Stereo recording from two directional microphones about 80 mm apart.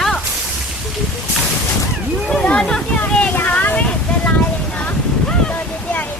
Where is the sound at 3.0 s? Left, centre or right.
Centre.